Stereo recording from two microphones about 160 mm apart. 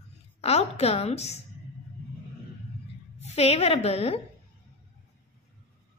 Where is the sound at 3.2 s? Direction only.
40° left (ahead or behind).